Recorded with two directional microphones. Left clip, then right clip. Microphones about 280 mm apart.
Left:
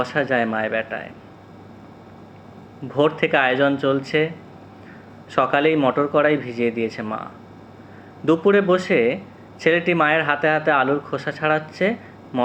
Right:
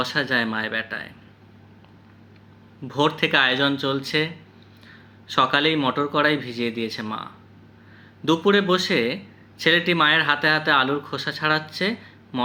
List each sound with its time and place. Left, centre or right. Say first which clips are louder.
0.1 s speech: left 2 dB; centre
2.9 s speech: left 2 dB; centre
5.3 s speech: left 2 dB; centre